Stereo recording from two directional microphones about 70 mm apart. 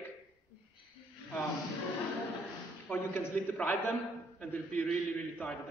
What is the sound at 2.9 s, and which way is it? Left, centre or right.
Speech, left.